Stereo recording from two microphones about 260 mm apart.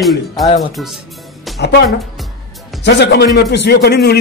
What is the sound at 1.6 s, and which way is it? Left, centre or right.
A man's voice, left.